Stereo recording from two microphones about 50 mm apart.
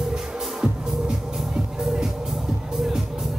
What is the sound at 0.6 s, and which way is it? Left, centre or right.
Music, right.